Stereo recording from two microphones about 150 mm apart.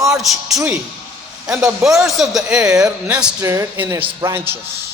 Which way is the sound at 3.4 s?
20° right (ahead or behind).